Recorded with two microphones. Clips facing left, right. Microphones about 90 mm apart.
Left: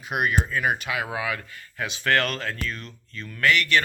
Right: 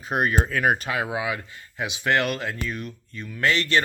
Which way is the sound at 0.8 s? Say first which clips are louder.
Right 2 dB; 35° right (ahead or behind).